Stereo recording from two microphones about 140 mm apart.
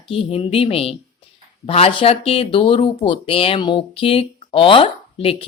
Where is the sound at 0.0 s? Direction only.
40° left (ahead or behind).